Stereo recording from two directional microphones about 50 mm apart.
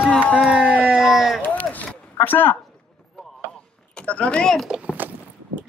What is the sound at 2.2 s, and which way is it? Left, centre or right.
Speech, left.